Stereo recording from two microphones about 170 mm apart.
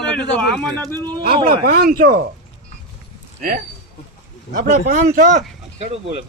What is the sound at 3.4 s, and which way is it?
Speech, 55° right (ahead or behind).